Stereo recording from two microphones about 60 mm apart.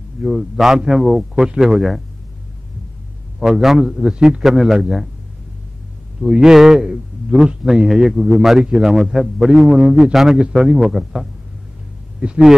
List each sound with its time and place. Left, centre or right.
0.2 s a man's voice: centre
3.3 s a man's voice: centre
6.2 s a man's voice: centre
12.2 s speech: centre